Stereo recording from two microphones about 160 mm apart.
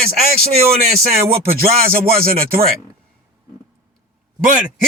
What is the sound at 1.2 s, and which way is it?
Speech, 65° right (ahead or behind).